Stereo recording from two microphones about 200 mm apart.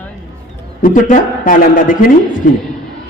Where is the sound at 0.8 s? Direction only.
40° left (ahead or behind).